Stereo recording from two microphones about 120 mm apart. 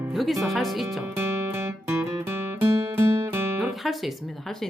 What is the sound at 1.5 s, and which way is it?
Music, 20° right (ahead or behind).